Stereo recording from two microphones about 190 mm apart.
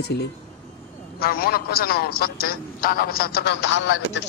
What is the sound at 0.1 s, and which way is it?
A woman's voice, 60° left (ahead or behind).